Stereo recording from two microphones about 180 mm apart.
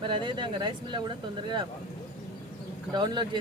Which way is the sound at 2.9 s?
25° right (ahead or behind).